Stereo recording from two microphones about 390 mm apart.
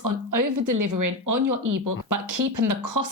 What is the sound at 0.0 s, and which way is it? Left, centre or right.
A woman's voice, right.